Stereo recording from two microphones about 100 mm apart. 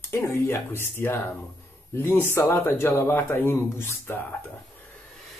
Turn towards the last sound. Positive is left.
turn(degrees=25)  # may be behind; listen again after turning